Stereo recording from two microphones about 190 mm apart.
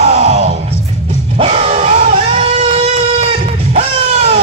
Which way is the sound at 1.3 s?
35° right (ahead or behind).